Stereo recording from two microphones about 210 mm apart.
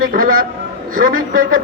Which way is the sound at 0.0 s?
40° right (ahead or behind).